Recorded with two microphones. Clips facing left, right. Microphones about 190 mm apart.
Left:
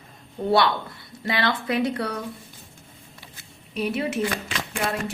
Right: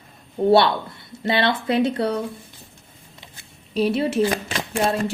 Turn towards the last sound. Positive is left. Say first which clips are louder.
# right 5 dB
turn(degrees=-35)  # may be behind; listen again after turning